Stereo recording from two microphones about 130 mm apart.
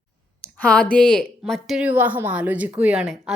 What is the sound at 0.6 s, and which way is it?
A woman's voice, 10° left (ahead or behind).